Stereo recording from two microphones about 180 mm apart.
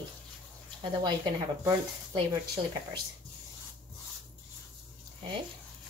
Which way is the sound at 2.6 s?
25° right (ahead or behind).